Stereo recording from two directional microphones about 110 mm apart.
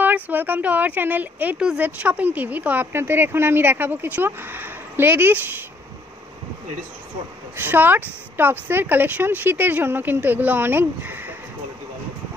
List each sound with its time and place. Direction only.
0.0 s speech: 15° right (ahead or behind)
7.5 s speech: 15° right (ahead or behind)